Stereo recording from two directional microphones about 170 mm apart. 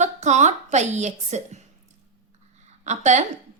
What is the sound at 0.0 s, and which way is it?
A woman's voice, 45° right (ahead or behind).